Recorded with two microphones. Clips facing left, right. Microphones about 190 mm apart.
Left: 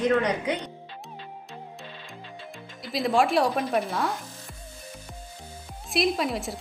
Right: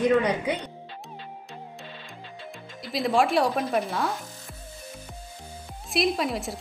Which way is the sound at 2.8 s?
Centre (ahead or behind).